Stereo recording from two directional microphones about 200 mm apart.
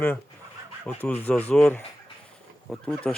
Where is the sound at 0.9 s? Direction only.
5° left (ahead or behind).